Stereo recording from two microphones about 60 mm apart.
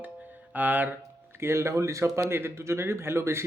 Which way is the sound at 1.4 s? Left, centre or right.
Right.